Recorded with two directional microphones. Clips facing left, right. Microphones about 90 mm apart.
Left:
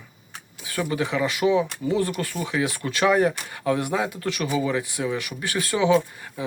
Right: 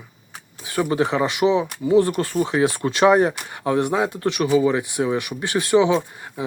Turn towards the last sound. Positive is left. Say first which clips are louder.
# even
turn(degrees=-25)  # may be behind; listen again after turning